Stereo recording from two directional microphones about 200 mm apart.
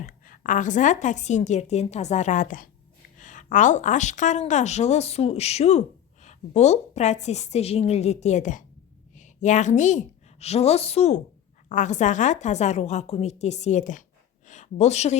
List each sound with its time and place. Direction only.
0.0 s a woman's voice: 40° left (ahead or behind)